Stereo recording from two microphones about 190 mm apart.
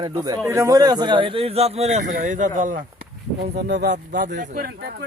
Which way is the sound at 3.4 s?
60° right (ahead or behind).